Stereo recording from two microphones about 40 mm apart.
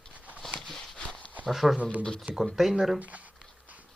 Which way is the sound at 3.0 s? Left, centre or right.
Right.